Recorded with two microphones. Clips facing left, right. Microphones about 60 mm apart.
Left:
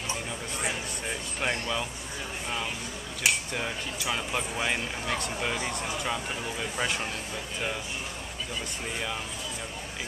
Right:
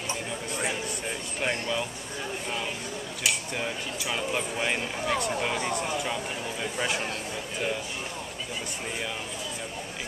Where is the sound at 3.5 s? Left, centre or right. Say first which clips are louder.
Right 1 dB; centre.